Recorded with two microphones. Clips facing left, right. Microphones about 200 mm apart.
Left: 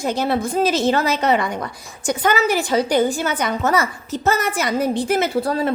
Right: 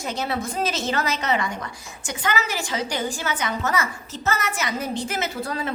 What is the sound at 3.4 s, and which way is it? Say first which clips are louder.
Speech: left 6 dB; 35° left (ahead or behind).